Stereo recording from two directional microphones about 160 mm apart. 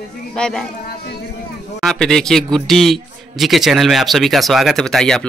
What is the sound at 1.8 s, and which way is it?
Speech, 5° left (ahead or behind).